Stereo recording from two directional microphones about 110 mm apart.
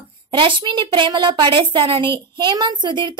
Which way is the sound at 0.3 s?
50° right (ahead or behind).